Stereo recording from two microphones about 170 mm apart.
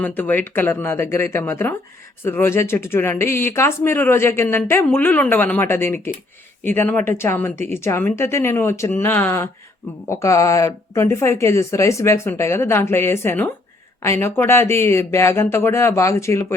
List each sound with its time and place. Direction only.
0.0 s speech: 10° left (ahead or behind)